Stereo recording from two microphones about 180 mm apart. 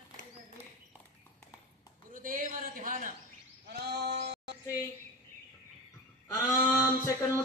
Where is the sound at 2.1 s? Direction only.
45° right (ahead or behind).